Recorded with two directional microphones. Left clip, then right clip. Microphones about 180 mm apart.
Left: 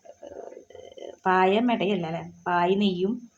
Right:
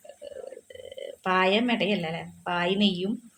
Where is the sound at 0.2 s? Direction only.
40° left (ahead or behind).